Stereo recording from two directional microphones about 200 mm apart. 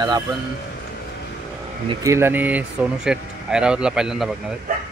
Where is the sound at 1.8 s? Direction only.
15° right (ahead or behind).